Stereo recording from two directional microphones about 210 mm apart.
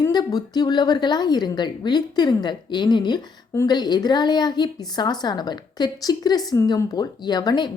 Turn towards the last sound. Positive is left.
turn(degrees=20)  # may be behind; listen again after turning